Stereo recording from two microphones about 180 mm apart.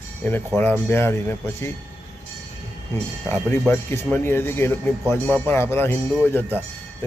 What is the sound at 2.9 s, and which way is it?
A man's voice, 10° left (ahead or behind).